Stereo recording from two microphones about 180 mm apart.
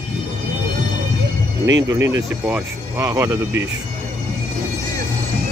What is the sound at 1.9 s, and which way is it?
Speech, 20° right (ahead or behind).